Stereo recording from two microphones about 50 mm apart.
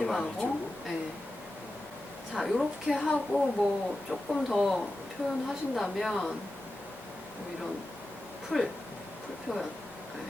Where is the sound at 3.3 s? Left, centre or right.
Right.